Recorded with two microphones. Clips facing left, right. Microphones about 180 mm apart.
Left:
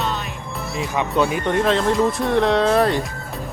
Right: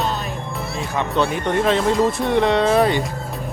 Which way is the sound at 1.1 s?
5° left (ahead or behind).